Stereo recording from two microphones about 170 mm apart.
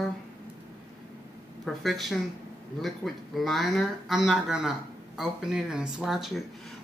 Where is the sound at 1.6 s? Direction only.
Centre (ahead or behind).